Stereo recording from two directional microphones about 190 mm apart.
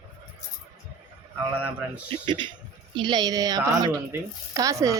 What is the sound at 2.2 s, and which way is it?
Speech, 25° right (ahead or behind).